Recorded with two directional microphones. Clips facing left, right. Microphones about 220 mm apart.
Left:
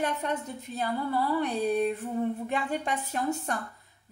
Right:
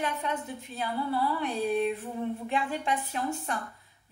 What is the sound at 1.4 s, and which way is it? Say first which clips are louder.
Speech: left 2 dB; 40° left (ahead or behind).